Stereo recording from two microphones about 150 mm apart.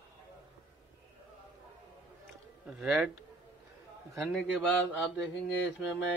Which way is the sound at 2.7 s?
10° right (ahead or behind).